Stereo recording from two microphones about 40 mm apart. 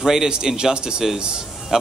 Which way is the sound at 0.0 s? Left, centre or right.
Centre.